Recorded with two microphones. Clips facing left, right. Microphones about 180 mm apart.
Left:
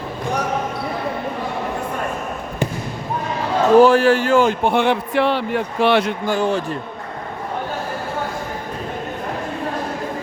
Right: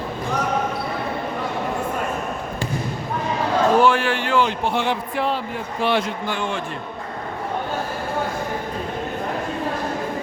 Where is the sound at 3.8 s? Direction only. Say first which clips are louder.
Left 6 dB; 40° left (ahead or behind); by 6.1 s 70° left (ahead or behind).